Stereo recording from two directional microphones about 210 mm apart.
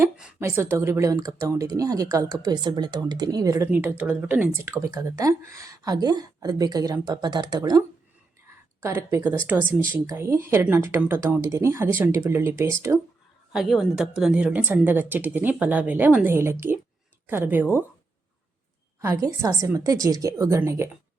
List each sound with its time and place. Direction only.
0.0 s speech: 5° right (ahead or behind)
13.5 s speech: centre (ahead or behind)
19.0 s speech: 15° right (ahead or behind)